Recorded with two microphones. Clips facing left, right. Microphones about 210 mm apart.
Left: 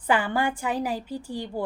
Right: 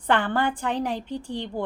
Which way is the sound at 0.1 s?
10° left (ahead or behind).